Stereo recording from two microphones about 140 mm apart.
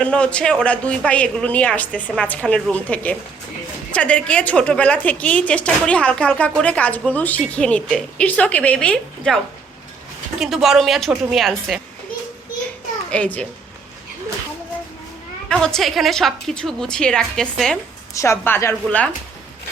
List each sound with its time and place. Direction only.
0.0 s a woman's voice: 10° left (ahead or behind)
10.4 s a woman's voice: centre (ahead or behind)
13.1 s a child's voice: 10° left (ahead or behind)
15.4 s a woman's voice: 5° left (ahead or behind)
18.1 s a woman's voice: 20° left (ahead or behind)